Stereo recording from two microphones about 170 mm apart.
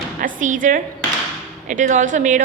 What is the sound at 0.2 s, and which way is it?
A woman's voice, 50° right (ahead or behind).